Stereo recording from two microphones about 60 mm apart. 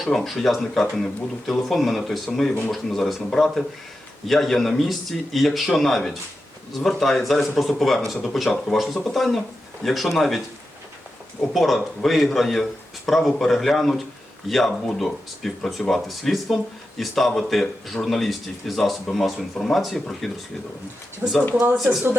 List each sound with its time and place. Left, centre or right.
0.0 s speech: centre
11.5 s speech: centre
21.2 s speech: right